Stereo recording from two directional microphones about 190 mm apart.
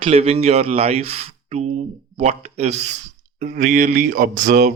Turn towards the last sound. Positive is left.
turn(degrees=-40)  # may be behind; listen again after turning